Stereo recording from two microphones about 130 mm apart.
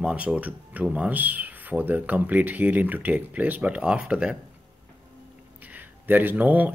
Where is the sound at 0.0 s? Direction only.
10° right (ahead or behind).